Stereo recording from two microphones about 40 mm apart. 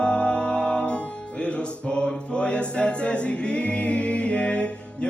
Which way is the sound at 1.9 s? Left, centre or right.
Left.